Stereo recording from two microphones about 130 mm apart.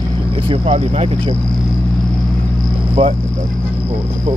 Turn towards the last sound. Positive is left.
turn(degrees=-45)  # may be behind; listen again after turning